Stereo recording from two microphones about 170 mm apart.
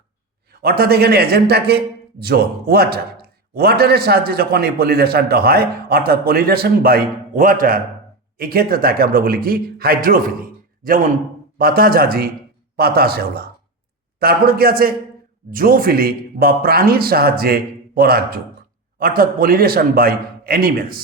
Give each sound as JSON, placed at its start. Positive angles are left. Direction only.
{"t": 0.6, "sound": "a man's voice", "side_deg": -60}